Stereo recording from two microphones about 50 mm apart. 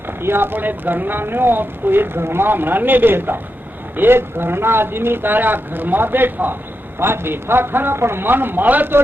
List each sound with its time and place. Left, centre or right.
0.2 s speech: right